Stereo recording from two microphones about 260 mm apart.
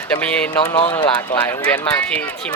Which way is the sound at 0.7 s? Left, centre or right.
Centre.